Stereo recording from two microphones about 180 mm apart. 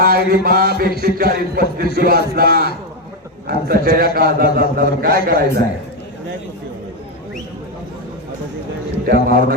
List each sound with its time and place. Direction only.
0.0 s a man's voice: 55° right (ahead or behind)
9.0 s a man's voice: 55° right (ahead or behind)